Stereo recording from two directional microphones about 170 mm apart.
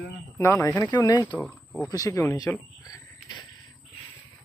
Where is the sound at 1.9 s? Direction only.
20° left (ahead or behind).